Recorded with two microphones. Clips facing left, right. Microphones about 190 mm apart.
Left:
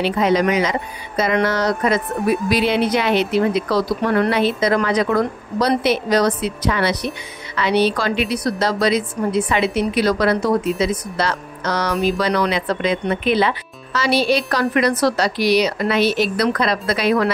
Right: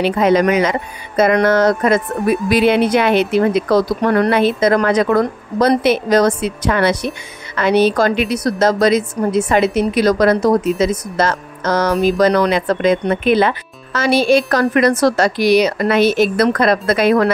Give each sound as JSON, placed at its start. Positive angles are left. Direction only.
{"t": 0.0, "sound": "speech", "side_deg": -55}